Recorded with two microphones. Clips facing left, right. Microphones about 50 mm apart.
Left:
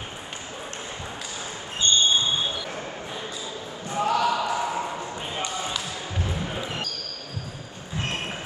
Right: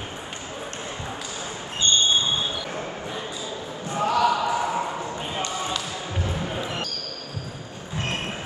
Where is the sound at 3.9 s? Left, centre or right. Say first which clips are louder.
Right 2 dB; centre.